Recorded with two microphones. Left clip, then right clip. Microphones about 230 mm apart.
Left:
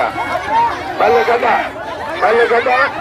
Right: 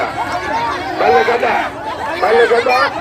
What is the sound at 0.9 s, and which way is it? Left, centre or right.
Speech, centre.